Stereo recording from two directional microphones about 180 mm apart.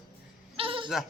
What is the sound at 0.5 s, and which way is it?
Bleat, 30° right (ahead or behind).